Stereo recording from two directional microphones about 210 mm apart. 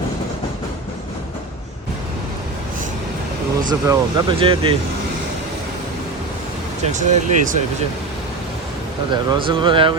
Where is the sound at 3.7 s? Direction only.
20° right (ahead or behind).